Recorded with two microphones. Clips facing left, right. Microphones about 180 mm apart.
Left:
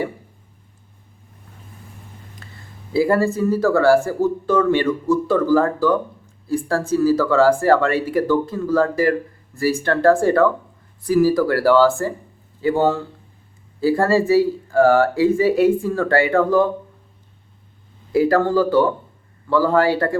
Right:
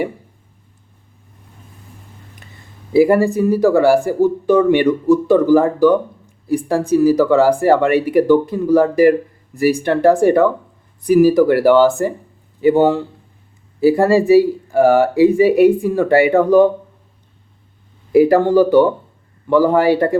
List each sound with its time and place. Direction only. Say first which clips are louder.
2.4 s a sound: even; 20° right (ahead or behind)
2.9 s speech: right 5 dB; 15° right (ahead or behind)
18.1 s speech: right 5 dB; 15° right (ahead or behind)